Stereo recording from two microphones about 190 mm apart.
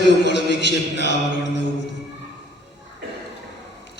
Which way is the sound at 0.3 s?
65° left (ahead or behind).